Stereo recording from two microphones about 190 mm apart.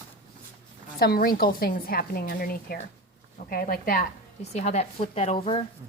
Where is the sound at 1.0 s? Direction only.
55° left (ahead or behind).